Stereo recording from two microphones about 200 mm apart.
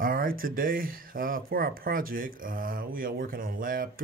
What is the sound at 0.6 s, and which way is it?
Speech, 45° right (ahead or behind).